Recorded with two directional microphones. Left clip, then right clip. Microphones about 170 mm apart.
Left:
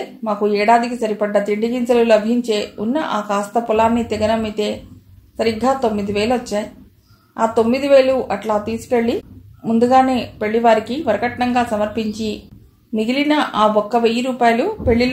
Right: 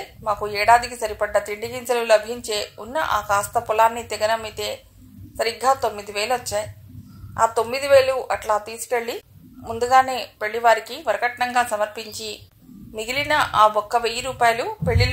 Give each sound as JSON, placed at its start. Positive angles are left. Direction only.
{"t": 0.2, "sound": "a woman's voice", "side_deg": -40}